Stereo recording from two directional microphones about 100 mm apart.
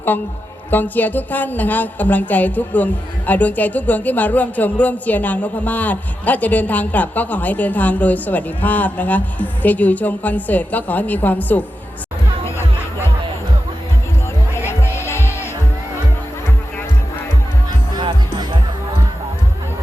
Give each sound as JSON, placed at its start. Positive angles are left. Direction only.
{"t": 0.7, "sound": "a woman's voice", "side_deg": 20}
{"t": 14.7, "sound": "music", "side_deg": 25}